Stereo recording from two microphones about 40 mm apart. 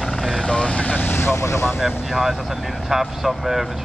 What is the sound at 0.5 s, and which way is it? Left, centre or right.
Speech, left.